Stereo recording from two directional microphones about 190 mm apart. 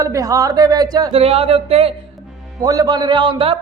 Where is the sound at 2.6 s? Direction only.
20° right (ahead or behind).